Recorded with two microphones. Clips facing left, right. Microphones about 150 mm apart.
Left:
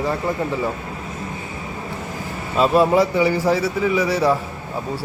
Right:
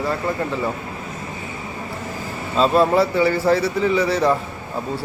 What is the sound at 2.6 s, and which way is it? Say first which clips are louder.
A man's voice: even; 10° left (ahead or behind).